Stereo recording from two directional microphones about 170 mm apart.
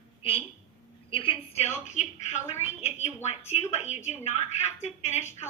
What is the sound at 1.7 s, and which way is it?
A woman's voice, 45° left (ahead or behind).